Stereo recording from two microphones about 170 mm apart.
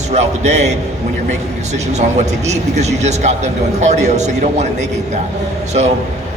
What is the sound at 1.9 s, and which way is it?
A man's voice, 40° right (ahead or behind).